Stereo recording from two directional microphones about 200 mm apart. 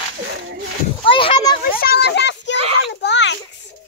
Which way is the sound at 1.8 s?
55° left (ahead or behind).